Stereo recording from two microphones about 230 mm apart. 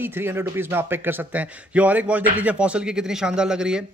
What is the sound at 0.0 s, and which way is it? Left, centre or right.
A man's voice, centre.